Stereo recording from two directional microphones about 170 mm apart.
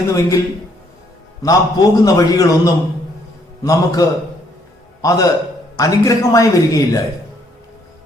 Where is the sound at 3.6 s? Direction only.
20° left (ahead or behind).